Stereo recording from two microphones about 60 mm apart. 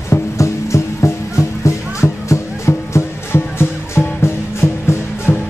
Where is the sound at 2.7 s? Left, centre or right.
Left.